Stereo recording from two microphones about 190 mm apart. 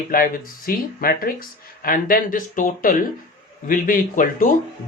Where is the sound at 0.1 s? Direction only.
50° left (ahead or behind).